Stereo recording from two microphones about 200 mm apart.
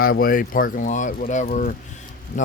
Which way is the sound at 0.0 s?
45° left (ahead or behind).